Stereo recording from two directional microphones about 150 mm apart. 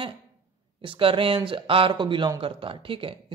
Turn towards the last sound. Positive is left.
turn(degrees=-35)  # may be behind; listen again after turning